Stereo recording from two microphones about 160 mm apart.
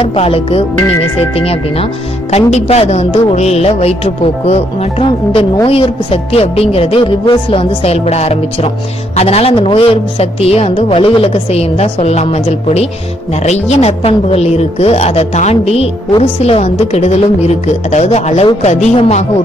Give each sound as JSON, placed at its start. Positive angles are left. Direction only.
{"t": 0.0, "sound": "speech", "side_deg": 35}